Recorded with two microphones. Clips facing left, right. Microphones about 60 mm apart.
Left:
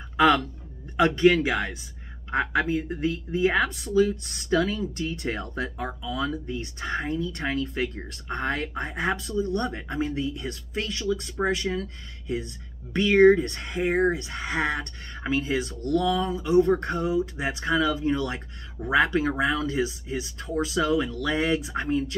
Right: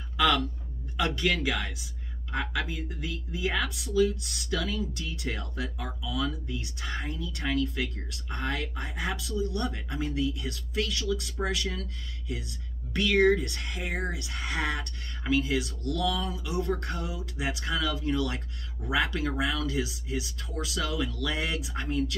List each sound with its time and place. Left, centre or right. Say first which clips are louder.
0.9 s speech: left 9 dB; left